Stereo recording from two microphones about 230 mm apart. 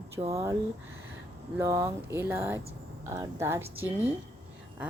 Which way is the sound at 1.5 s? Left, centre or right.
Centre.